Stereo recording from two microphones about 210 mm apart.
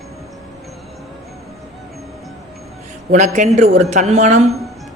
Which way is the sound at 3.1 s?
35° right (ahead or behind).